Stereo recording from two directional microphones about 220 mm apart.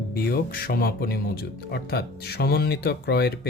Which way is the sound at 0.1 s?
45° left (ahead or behind).